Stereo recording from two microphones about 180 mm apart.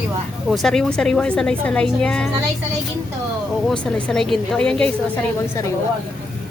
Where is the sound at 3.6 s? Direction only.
5° left (ahead or behind).